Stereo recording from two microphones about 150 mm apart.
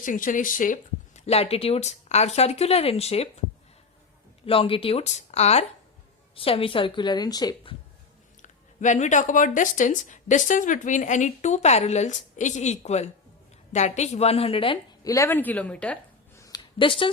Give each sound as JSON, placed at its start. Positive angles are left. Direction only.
{"t": 0.0, "sound": "speech", "side_deg": 60}
{"t": 1.3, "sound": "speech", "side_deg": 40}
{"t": 4.4, "sound": "speech", "side_deg": 40}
{"t": 8.4, "sound": "speech", "side_deg": 55}
{"t": 15.0, "sound": "speech", "side_deg": 20}
{"t": 16.4, "sound": "a sound", "side_deg": 30}